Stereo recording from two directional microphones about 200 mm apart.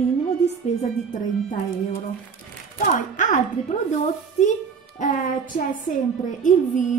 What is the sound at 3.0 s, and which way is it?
Speech, 40° left (ahead or behind).